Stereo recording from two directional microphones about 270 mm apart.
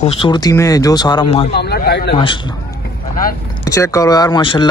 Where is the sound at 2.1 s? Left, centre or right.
Centre.